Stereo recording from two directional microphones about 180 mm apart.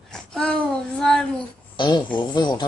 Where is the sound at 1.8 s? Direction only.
25° left (ahead or behind).